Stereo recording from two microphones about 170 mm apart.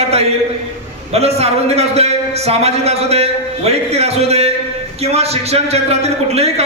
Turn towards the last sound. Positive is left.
turn(degrees=-40)  # may be behind; listen again after turning